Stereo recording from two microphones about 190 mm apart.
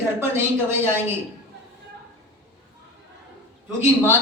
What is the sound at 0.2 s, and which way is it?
Speech, 10° right (ahead or behind).